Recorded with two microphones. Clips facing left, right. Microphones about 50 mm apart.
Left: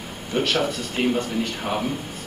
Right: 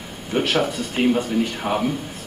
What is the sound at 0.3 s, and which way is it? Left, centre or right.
A man's voice, centre.